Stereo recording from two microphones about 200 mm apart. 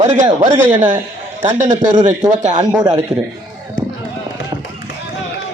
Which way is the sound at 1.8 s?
40° right (ahead or behind).